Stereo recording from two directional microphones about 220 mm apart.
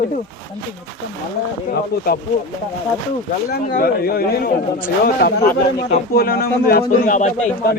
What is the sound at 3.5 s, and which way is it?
Speech, 45° left (ahead or behind).